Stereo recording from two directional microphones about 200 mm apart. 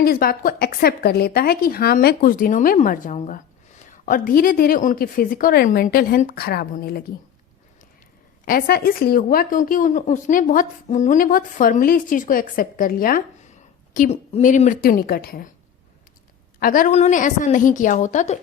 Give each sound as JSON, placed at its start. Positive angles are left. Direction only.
{"t": 0.0, "sound": "a woman's voice", "side_deg": 50}
{"t": 8.4, "sound": "a woman's voice", "side_deg": 50}
{"t": 16.6, "sound": "a woman's voice", "side_deg": 45}